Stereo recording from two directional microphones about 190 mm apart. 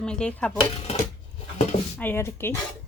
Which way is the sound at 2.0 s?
10° left (ahead or behind).